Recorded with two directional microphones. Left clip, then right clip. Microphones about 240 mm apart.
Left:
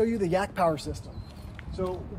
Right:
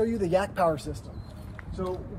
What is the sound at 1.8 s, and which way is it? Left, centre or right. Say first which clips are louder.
Speech: left 1 dB; left.